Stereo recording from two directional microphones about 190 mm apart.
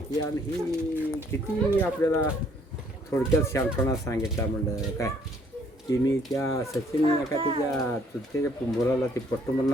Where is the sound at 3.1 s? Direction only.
15° left (ahead or behind).